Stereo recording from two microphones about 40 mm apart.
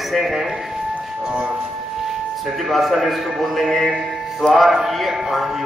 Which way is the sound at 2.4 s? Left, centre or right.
Centre.